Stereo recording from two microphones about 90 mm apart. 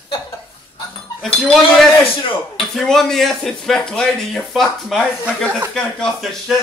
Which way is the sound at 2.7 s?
5° left (ahead or behind).